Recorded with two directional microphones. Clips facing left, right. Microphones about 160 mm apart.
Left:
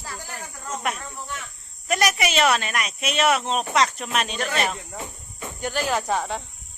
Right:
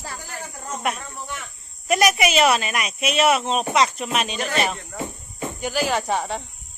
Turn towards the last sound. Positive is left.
turn(degrees=0)  # may be behind; listen again after turning